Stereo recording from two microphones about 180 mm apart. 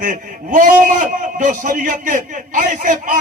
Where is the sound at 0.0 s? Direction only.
45° right (ahead or behind).